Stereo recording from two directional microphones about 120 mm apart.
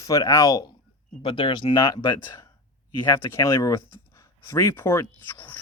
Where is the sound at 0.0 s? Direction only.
30° left (ahead or behind).